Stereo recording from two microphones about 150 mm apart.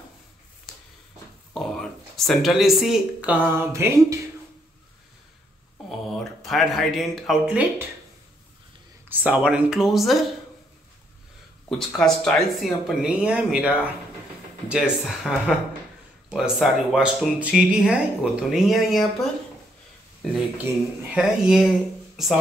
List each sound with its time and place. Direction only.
1.5 s speech: centre (ahead or behind); by 4.2 s 15° right (ahead or behind)
5.9 s speech: centre (ahead or behind)
9.1 s speech: 10° right (ahead or behind)
11.7 s speech: 5° left (ahead or behind)
20.7 s speech: 15° right (ahead or behind)
21.1 s speech: 5° right (ahead or behind)